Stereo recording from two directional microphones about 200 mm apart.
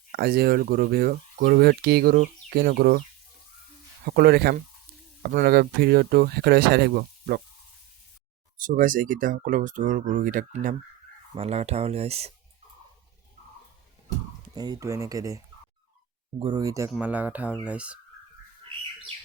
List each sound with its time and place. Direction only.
0.1 s speech: 50° right (ahead or behind)
4.0 s speech: 50° right (ahead or behind)
8.5 s speech: 45° right (ahead or behind)
14.5 s fowl: 20° right (ahead or behind)
16.4 s fowl: 20° right (ahead or behind); by 18.0 s 5° right (ahead or behind)